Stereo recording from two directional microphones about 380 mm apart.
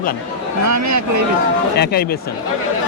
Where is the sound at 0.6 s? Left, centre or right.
Right.